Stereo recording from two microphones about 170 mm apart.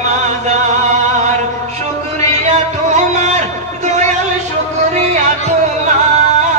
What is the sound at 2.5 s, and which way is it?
Music, 40° right (ahead or behind).